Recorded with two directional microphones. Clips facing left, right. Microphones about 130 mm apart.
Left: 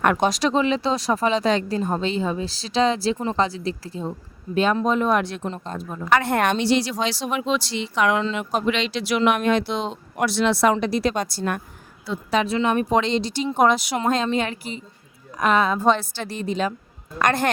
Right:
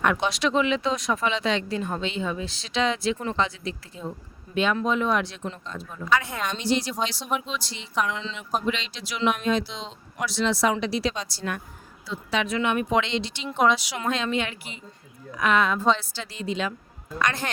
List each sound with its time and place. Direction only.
0.0 s speech: 45° left (ahead or behind)
6.1 s a woman's voice: 65° left (ahead or behind)
7.0 s speech: 90° left
8.0 s speech: 60° left (ahead or behind)
12.3 s speech: 35° left (ahead or behind)
15.9 s speech: 50° left (ahead or behind)